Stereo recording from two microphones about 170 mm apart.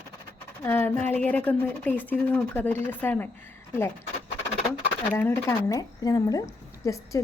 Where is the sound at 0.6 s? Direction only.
15° left (ahead or behind).